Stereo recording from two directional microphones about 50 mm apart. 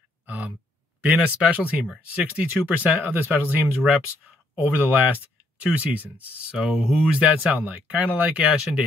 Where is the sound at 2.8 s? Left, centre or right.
Right.